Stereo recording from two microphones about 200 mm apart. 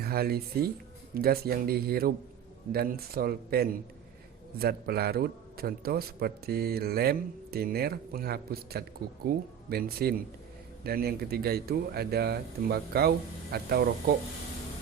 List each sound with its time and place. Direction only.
0.0 s a man's voice: 50° right (ahead or behind)